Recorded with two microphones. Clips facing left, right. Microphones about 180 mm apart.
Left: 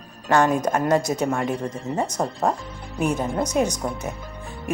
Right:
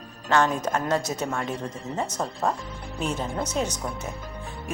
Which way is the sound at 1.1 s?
55° left (ahead or behind).